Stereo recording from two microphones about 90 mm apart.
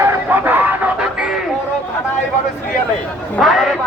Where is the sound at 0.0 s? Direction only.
20° right (ahead or behind).